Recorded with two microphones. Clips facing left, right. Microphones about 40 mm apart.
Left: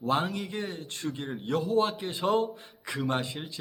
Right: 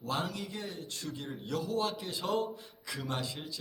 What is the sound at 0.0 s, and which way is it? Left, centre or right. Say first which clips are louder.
A man's voice: left 7 dB; left.